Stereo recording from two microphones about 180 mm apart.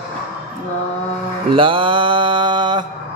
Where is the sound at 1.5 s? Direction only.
30° right (ahead or behind).